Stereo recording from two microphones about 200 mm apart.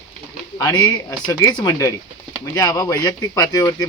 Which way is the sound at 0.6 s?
20° left (ahead or behind).